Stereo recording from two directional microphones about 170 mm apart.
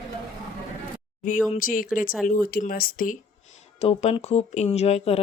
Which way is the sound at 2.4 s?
60° left (ahead or behind).